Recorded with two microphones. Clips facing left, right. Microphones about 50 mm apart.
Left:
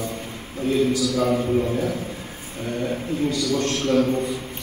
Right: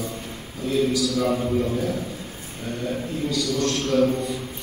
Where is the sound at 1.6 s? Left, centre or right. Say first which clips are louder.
Left 1 dB; left.